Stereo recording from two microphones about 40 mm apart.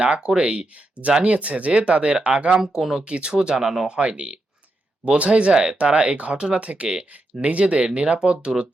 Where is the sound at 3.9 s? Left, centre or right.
Right.